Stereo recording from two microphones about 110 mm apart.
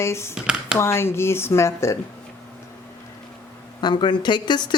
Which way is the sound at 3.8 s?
45° left (ahead or behind).